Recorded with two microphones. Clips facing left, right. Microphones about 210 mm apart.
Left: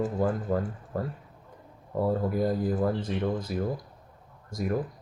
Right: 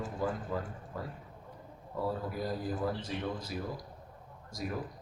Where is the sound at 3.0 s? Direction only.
50° left (ahead or behind).